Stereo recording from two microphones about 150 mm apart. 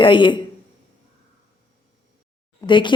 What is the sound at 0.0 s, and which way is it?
Speech, 30° left (ahead or behind).